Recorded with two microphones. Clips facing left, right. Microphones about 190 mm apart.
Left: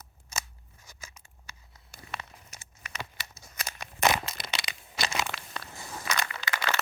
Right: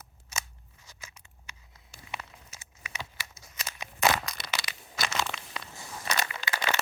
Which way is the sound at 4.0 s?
20° left (ahead or behind).